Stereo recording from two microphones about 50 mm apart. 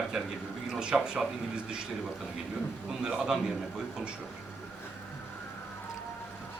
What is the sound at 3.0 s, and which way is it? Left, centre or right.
Speech, centre.